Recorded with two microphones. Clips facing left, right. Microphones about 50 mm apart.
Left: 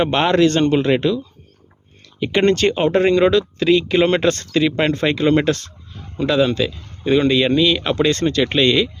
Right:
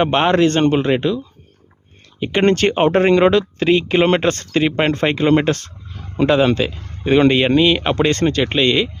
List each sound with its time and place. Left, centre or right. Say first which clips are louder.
0.0 s speech: right 1 dB; right
2.3 s speech: right 1 dB; right
2.6 s speech: right 1 dB; right
8.4 s speech: even; centre